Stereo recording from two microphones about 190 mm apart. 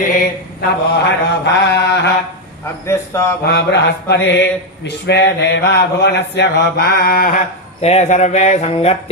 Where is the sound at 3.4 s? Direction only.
60° left (ahead or behind).